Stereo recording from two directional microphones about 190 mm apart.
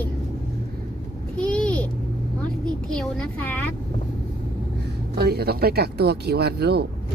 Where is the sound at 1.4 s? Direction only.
5° left (ahead or behind).